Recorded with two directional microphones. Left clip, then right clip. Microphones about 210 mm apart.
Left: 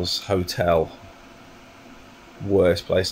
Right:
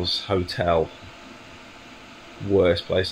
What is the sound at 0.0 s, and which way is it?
Speech, 10° left (ahead or behind).